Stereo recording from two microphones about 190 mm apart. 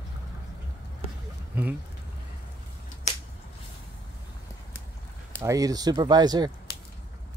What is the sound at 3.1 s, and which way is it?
Finger snapping, 40° left (ahead or behind).